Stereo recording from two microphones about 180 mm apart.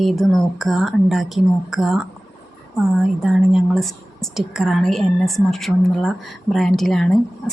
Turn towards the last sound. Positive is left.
turn(degrees=0)  # may be behind; listen again after turning